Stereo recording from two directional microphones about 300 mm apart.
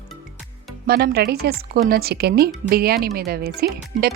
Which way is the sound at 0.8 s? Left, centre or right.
Right.